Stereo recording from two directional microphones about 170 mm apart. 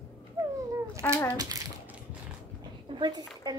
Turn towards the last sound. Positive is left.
turn(degrees=-25)  # may be behind; listen again after turning